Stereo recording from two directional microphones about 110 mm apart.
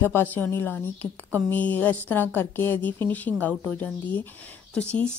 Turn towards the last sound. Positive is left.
turn(degrees=10)  # may be behind; listen again after turning